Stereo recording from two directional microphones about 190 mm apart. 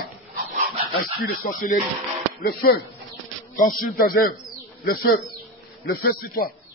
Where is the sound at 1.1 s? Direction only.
50° left (ahead or behind).